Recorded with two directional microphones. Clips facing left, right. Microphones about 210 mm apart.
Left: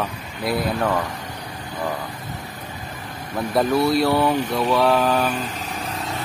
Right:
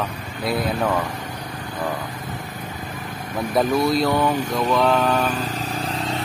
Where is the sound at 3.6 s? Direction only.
5° left (ahead or behind).